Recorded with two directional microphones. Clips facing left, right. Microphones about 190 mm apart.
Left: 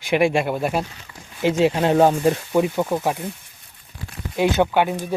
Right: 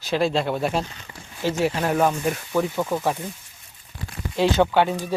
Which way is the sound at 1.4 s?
20° left (ahead or behind).